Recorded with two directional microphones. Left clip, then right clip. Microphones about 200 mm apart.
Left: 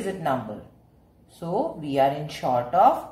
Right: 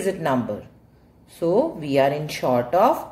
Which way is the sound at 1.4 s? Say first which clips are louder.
Right 7 dB; 45° right (ahead or behind).